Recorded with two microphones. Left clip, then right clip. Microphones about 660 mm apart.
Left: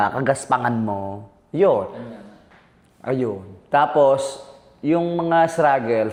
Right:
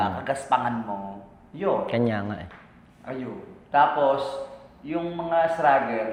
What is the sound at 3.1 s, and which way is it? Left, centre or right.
A man's voice, left.